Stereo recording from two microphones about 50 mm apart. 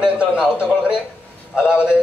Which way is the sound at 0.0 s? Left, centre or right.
Centre.